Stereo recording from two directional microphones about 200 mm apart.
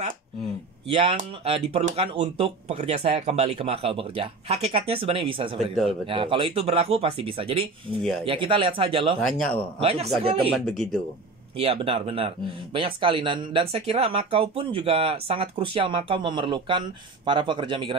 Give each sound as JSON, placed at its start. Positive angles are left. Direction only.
{"t": 0.8, "sound": "speech", "side_deg": -25}
{"t": 8.0, "sound": "speech", "side_deg": 0}
{"t": 8.3, "sound": "speech", "side_deg": -25}
{"t": 9.2, "sound": "speech", "side_deg": 5}
{"t": 9.8, "sound": "speech", "side_deg": -30}
{"t": 10.5, "sound": "speech", "side_deg": 0}
{"t": 11.5, "sound": "speech", "side_deg": -30}